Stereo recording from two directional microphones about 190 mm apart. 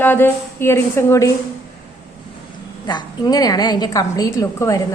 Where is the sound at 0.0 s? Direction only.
10° left (ahead or behind).